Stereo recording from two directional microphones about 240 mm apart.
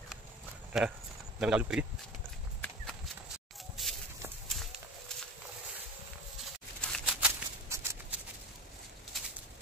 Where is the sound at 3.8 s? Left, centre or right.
Centre.